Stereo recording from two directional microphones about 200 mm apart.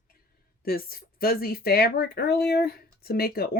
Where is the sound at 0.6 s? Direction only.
50° left (ahead or behind).